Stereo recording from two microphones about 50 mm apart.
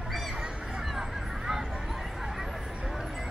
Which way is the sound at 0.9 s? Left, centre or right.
Centre.